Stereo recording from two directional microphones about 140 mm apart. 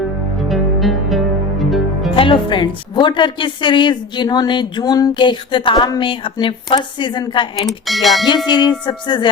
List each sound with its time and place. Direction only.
0.5 s music: centre (ahead or behind)
2.1 s a woman's voice: 35° left (ahead or behind)
7.7 s speech: centre (ahead or behind)
8.4 s a woman's voice: 30° left (ahead or behind)